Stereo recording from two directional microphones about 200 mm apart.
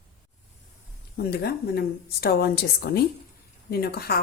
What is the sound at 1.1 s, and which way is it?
A woman's voice, 55° left (ahead or behind).